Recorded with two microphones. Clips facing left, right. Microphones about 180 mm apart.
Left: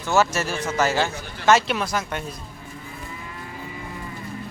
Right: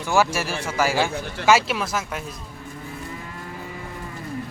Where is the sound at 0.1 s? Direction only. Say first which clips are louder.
Even; 10° right (ahead or behind).